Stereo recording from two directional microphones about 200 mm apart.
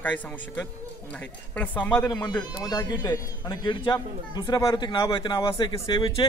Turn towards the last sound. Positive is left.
turn(degrees=25)  # may be behind; listen again after turning